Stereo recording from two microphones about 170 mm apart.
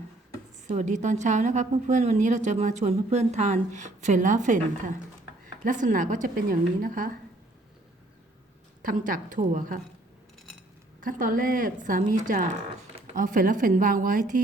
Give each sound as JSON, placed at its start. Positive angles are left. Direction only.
{"t": 0.7, "sound": "a woman's voice", "side_deg": -45}
{"t": 8.8, "sound": "a woman's voice", "side_deg": -55}
{"t": 11.0, "sound": "a woman's voice", "side_deg": -55}